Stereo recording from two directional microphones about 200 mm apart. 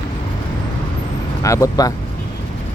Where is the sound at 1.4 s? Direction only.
15° left (ahead or behind).